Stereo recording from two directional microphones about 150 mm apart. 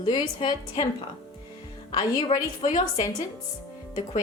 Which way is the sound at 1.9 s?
35° left (ahead or behind).